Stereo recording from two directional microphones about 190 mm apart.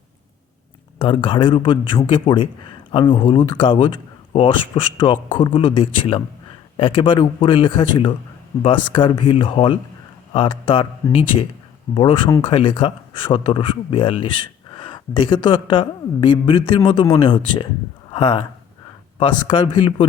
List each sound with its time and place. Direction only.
0.9 s speech: 25° left (ahead or behind)